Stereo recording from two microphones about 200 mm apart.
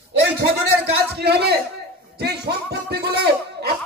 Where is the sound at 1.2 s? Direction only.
55° right (ahead or behind).